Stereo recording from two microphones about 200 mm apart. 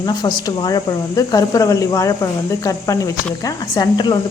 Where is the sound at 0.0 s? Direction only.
20° left (ahead or behind).